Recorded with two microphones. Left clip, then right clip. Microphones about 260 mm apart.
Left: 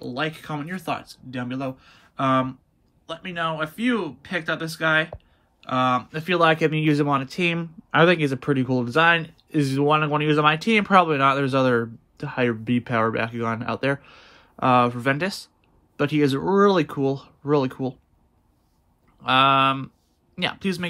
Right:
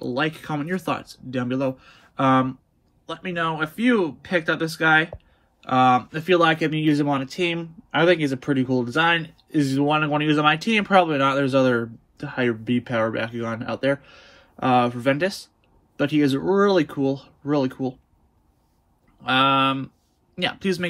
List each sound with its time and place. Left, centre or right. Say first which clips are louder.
0.0 s speech: right 3 dB; centre
19.2 s speech: left 1 dB; centre